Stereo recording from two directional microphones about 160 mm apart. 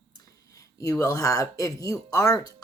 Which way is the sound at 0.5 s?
20° left (ahead or behind).